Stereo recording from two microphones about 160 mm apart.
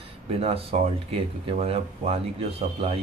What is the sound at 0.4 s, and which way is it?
Speech, 40° right (ahead or behind).